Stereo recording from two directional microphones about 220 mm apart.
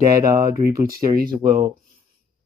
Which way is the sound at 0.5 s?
40° right (ahead or behind).